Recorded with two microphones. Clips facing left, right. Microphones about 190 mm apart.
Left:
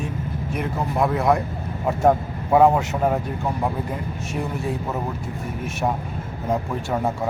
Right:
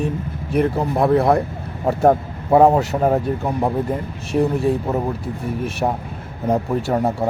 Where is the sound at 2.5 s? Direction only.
30° right (ahead or behind).